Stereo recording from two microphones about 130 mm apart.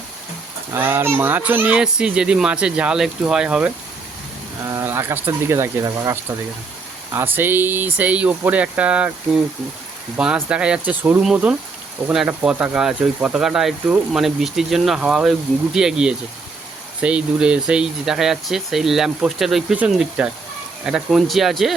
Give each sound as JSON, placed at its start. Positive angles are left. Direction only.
{"t": 0.7, "sound": "speech", "side_deg": -20}
{"t": 4.6, "sound": "speech", "side_deg": -25}